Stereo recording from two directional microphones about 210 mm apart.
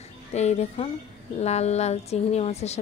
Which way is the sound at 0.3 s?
30° left (ahead or behind).